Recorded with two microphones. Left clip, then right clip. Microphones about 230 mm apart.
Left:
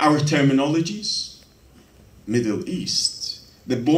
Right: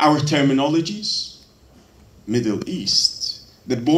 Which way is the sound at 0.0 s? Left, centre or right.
Left.